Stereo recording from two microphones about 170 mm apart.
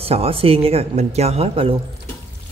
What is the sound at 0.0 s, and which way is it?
Speech, 35° right (ahead or behind).